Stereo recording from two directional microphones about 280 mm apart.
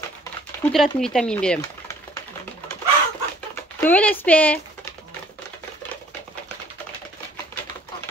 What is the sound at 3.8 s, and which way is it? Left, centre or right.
Speech, centre.